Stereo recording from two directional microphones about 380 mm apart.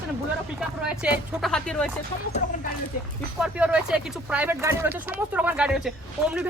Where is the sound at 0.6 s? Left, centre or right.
Centre.